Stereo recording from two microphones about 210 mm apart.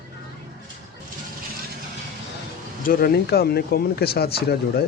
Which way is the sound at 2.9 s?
45° left (ahead or behind).